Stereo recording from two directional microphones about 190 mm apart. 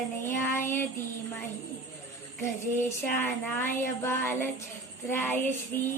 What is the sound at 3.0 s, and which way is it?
Music, 10° left (ahead or behind).